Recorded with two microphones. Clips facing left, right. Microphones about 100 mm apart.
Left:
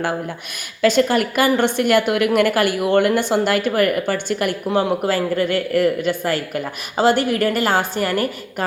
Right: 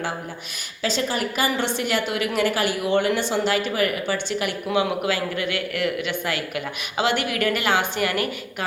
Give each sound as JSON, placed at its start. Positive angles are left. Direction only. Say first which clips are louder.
{"t": 0.8, "sound": "a woman's voice", "louder": "left 9 dB", "side_deg": 55}